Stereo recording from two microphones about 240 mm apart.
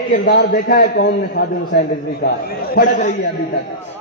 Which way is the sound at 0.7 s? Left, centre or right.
Left.